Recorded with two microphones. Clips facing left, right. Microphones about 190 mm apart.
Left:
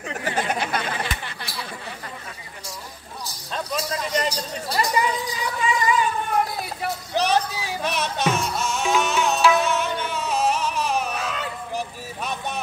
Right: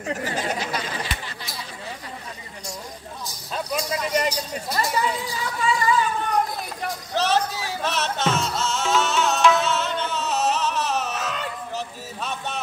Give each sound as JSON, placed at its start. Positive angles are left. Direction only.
{"t": 0.2, "sound": "chatter", "side_deg": 60}
{"t": 3.5, "sound": "a sound", "side_deg": -10}
{"t": 4.8, "sound": "speech", "side_deg": 15}
{"t": 7.2, "sound": "music", "side_deg": 15}
{"t": 11.7, "sound": "vehicle", "side_deg": 15}